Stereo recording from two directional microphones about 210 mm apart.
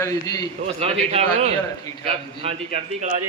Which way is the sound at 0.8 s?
30° right (ahead or behind).